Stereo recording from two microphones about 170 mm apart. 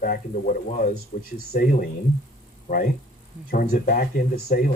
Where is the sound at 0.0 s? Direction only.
55° left (ahead or behind).